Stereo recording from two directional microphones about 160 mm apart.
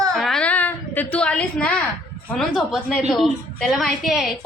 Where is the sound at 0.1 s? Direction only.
Centre (ahead or behind).